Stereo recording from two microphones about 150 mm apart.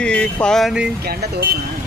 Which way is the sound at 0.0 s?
5° left (ahead or behind).